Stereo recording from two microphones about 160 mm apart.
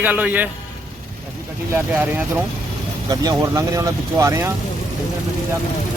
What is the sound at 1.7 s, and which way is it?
Speech, 10° right (ahead or behind).